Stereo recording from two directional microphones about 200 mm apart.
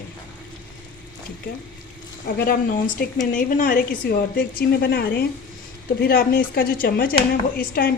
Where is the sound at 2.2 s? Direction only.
50° left (ahead or behind).